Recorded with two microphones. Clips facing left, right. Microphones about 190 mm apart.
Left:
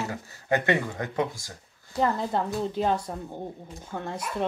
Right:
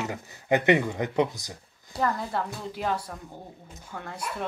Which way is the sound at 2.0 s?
25° left (ahead or behind).